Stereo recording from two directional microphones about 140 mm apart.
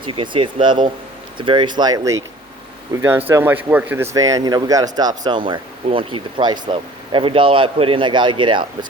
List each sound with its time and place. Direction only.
0.0 s speech: 35° right (ahead or behind)